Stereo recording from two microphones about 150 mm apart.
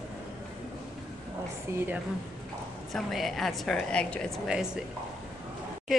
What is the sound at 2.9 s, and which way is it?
Speech, centre (ahead or behind).